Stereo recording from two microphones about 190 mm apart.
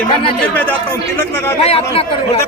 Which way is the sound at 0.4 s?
10° left (ahead or behind).